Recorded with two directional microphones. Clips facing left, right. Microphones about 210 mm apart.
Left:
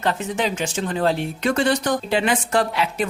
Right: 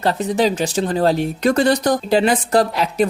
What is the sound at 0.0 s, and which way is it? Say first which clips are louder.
Speech: right 6 dB; 35° right (ahead or behind).